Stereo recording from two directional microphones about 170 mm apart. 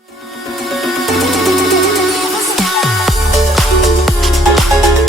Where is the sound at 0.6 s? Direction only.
Centre (ahead or behind).